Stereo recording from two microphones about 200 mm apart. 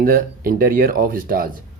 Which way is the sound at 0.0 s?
45° right (ahead or behind).